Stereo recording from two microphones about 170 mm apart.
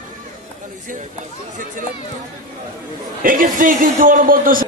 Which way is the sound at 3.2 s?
55° right (ahead or behind).